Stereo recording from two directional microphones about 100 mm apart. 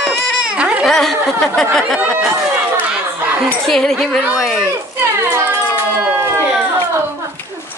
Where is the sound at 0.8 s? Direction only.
5° left (ahead or behind).